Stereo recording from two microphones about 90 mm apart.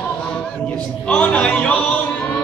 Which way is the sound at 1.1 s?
15° left (ahead or behind).